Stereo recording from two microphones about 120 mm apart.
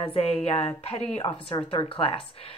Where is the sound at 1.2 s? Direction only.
45° left (ahead or behind).